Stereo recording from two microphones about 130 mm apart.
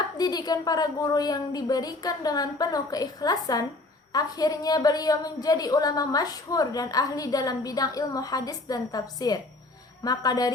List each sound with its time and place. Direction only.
0.2 s a woman's voice: 30° left (ahead or behind)